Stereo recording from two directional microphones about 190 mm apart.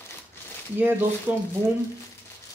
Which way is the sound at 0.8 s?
10° right (ahead or behind).